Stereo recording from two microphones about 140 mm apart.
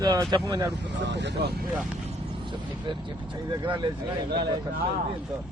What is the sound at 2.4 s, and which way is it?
Speech, 35° right (ahead or behind).